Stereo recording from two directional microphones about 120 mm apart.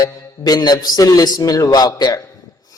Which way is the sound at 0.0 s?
35° left (ahead or behind).